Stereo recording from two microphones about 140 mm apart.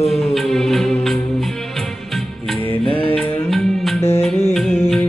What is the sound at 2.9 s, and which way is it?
Music, 10° left (ahead or behind).